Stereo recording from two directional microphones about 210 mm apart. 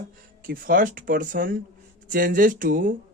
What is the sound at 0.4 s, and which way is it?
A man's voice, 40° right (ahead or behind).